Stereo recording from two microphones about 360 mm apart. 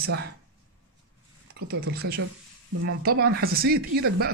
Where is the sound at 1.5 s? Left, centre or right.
Right.